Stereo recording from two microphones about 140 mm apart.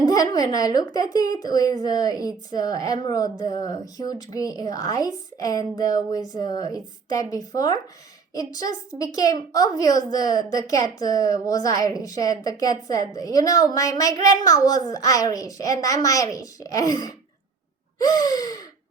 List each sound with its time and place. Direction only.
0.1 s a woman's voice: 25° left (ahead or behind)
9.0 s a woman's voice: 25° left (ahead or behind)